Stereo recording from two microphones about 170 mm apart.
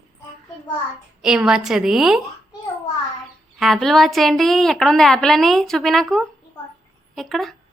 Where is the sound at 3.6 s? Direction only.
Centre (ahead or behind).